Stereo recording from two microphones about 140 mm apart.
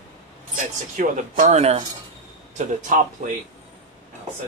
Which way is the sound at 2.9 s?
70° right (ahead or behind).